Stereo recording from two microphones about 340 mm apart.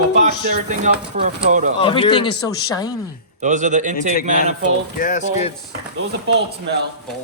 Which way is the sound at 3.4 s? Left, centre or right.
Right.